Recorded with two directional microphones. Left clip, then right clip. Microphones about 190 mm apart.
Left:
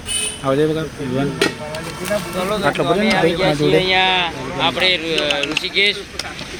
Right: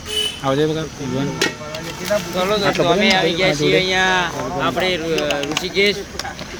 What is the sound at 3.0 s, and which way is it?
Speech, 55° right (ahead or behind).